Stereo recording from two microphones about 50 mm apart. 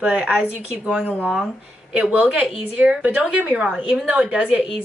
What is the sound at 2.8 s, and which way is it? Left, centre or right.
Speech, right.